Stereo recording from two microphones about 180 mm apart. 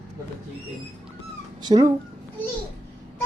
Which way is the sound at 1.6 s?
20° right (ahead or behind).